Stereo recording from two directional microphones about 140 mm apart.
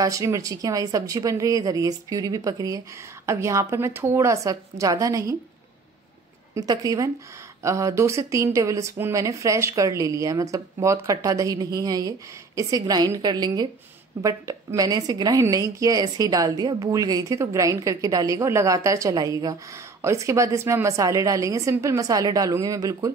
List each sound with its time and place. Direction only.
0.0 s a woman's voice: 25° right (ahead or behind)
6.5 s a woman's voice: 25° right (ahead or behind)